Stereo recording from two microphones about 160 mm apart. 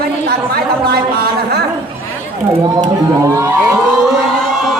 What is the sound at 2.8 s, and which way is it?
Speech, 20° right (ahead or behind).